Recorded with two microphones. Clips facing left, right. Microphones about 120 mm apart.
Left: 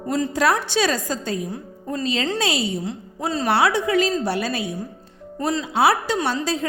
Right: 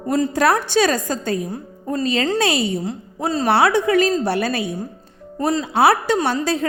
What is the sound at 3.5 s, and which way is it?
A woman's voice, 55° right (ahead or behind).